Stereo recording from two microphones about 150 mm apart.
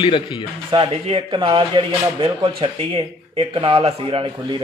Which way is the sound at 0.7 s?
35° right (ahead or behind).